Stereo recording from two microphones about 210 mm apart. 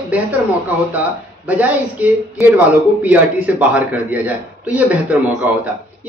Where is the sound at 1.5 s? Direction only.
5° right (ahead or behind).